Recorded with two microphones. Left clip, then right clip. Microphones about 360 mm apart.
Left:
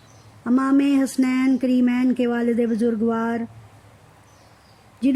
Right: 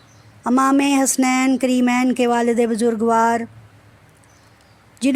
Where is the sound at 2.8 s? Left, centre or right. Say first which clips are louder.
Right 7 dB; right.